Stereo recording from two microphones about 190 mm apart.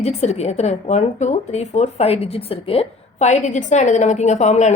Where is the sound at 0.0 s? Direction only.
35° left (ahead or behind).